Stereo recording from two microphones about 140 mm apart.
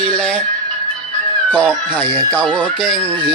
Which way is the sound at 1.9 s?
15° left (ahead or behind).